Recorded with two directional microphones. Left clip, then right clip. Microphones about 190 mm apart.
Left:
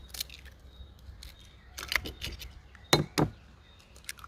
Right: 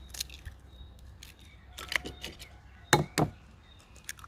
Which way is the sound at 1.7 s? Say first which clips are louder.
Left 1 dB; 15° left (ahead or behind).